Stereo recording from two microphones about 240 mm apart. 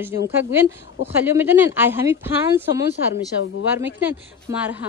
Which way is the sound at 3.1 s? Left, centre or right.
Left.